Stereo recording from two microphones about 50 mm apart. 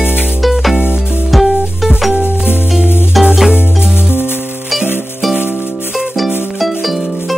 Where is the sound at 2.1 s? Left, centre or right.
Left.